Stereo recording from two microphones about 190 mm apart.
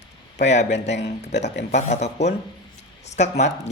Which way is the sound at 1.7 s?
35° left (ahead or behind).